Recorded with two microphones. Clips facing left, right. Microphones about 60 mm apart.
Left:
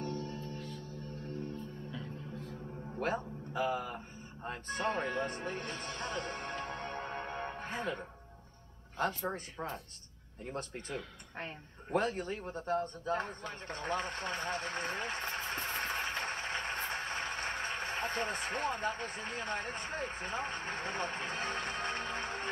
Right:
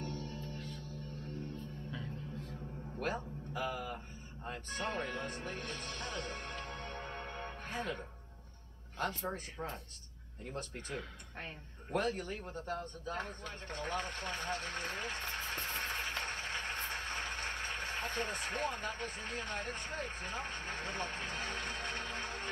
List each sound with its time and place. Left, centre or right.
0.0 s music: centre
3.0 s a sound: centre
4.5 s speech: centre
10.4 s speech: centre